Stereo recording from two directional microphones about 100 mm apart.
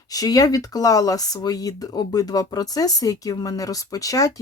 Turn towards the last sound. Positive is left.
turn(degrees=35)  # may be behind; listen again after turning